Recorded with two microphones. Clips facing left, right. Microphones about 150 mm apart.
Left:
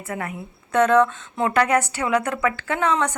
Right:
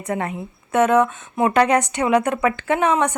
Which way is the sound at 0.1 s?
25° right (ahead or behind).